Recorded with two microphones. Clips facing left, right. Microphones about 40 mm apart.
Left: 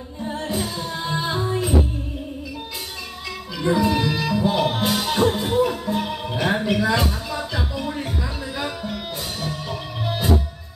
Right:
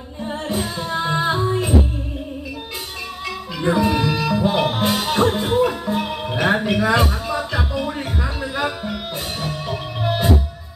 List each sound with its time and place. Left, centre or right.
0.3 s music: right
3.6 s music: right
4.9 s music: right
5.2 s music: right